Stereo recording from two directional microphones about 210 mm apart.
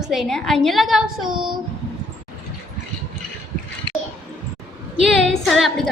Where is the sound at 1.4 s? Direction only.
20° right (ahead or behind).